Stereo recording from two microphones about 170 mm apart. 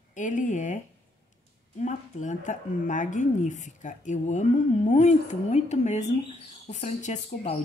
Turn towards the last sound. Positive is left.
turn(degrees=45)  # may be behind; listen again after turning